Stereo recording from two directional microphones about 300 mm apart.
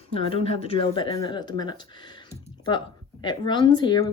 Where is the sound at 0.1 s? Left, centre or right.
Centre.